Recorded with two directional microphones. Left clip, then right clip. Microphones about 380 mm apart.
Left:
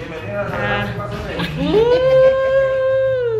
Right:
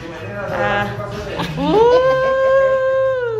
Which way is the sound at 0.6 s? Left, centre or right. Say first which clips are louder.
Right 5 dB; centre.